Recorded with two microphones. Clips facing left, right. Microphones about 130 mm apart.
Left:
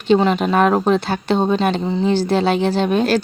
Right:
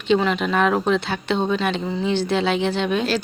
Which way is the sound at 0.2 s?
35° left (ahead or behind).